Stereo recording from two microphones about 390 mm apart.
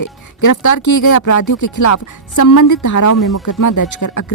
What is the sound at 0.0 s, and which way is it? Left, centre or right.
Speech, left.